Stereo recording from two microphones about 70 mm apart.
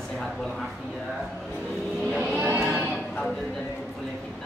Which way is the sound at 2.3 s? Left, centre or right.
Right.